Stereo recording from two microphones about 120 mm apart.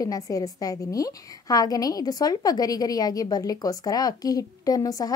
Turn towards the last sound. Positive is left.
turn(degrees=30)  # may be behind; listen again after turning